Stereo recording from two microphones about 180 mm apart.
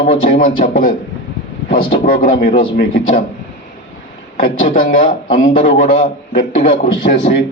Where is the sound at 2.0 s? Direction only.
55° left (ahead or behind).